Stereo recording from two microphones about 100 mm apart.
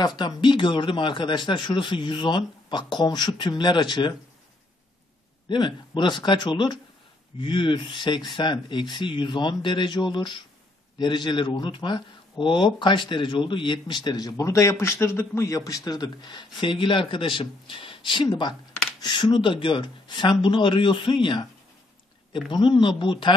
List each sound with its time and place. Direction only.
0.0 s speech: 45° left (ahead or behind)
5.5 s speech: 50° left (ahead or behind)
22.5 s speech: 50° left (ahead or behind)